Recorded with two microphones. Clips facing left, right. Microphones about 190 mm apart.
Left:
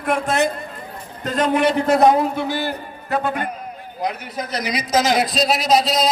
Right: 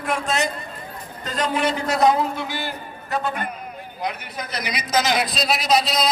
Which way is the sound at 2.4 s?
40° left (ahead or behind).